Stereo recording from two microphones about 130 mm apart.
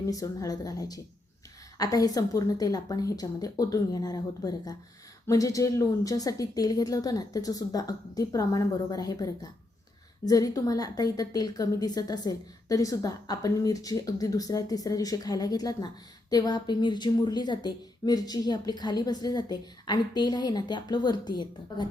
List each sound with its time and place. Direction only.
0.1 s a woman's voice: 25° left (ahead or behind)